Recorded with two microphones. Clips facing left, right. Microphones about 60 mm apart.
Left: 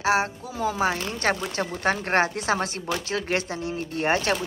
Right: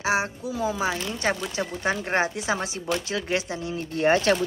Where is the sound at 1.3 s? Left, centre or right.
Left.